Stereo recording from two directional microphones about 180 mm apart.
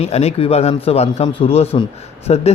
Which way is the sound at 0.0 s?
35° left (ahead or behind).